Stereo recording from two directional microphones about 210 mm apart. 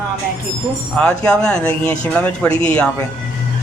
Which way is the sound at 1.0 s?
5° left (ahead or behind).